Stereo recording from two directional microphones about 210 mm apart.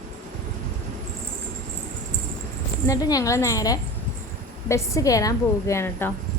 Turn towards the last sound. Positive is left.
turn(degrees=10)  # may be behind; listen again after turning